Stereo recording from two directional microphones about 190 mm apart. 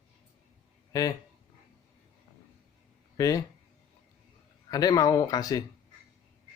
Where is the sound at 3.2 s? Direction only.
20° left (ahead or behind).